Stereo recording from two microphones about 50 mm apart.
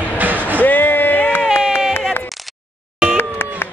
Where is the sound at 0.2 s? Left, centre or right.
Right.